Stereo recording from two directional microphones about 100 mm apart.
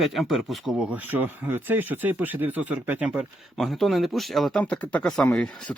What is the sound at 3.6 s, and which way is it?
Speech, centre (ahead or behind).